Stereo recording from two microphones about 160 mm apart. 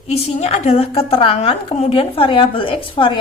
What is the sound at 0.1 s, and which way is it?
A woman's voice, 40° left (ahead or behind).